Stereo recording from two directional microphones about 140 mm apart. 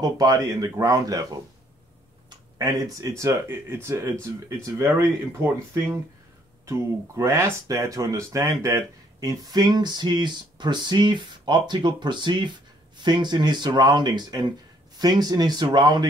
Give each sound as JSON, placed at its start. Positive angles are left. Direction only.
{"t": 0.0, "sound": "speech", "side_deg": -25}
{"t": 2.2, "sound": "speech", "side_deg": -25}
{"t": 6.6, "sound": "speech", "side_deg": -20}